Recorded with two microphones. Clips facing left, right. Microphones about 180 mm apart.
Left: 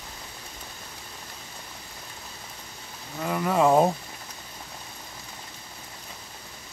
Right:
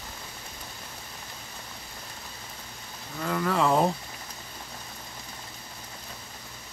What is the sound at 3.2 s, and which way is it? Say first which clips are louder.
Speech: left 3 dB; 15° left (ahead or behind).